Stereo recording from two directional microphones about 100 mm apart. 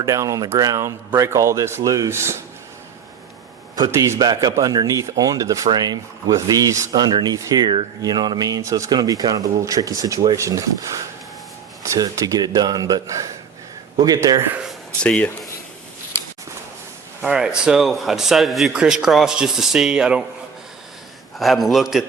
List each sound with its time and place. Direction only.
0.0 s speech: 30° right (ahead or behind)
3.8 s a man's voice: 30° right (ahead or behind)
4.2 s speech: 40° right (ahead or behind)
6.9 s speech: 45° right (ahead or behind)
15.0 s speech: 10° left (ahead or behind)
17.2 s a man's voice: 5° right (ahead or behind)
21.3 s a man's voice: centre (ahead or behind)